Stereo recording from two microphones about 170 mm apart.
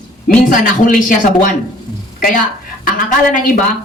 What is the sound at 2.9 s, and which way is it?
Speech, 55° left (ahead or behind).